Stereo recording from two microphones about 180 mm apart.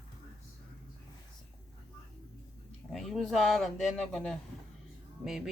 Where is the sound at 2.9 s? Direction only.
Centre (ahead or behind).